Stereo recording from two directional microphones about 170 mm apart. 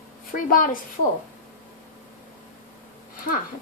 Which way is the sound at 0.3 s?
55° left (ahead or behind).